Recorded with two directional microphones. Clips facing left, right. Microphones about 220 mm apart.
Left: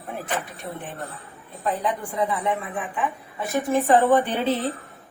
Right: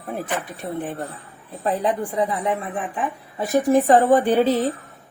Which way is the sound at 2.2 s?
30° right (ahead or behind).